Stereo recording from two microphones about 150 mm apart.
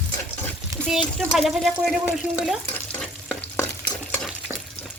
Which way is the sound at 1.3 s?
Centre (ahead or behind).